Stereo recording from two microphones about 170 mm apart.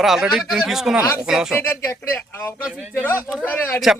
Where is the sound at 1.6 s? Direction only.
15° left (ahead or behind).